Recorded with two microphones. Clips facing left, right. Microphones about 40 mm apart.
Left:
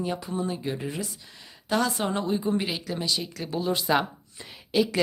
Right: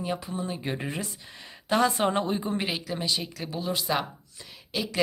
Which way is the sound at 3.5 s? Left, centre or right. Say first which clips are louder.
Left 4 dB; centre.